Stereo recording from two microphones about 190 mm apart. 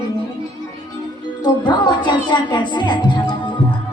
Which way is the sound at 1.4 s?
25° left (ahead or behind).